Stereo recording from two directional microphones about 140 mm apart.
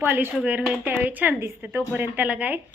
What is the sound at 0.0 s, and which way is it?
A woman's voice, 15° right (ahead or behind).